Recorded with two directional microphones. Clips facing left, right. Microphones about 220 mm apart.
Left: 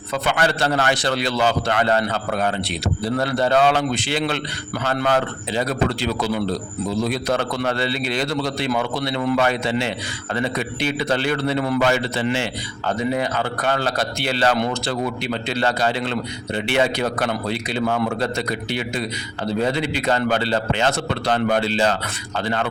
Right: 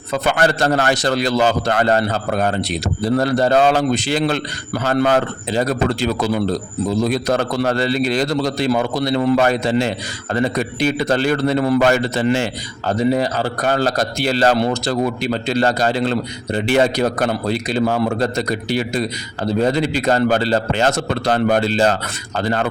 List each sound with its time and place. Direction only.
0.1 s a man's voice: 45° right (ahead or behind)